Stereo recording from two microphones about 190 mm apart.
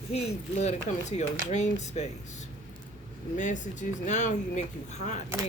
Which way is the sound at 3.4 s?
40° left (ahead or behind).